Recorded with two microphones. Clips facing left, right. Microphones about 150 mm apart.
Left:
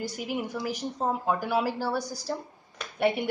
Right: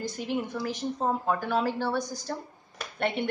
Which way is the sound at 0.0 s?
10° left (ahead or behind).